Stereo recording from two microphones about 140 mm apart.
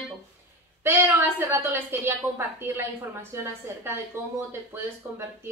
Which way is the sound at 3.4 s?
15° right (ahead or behind).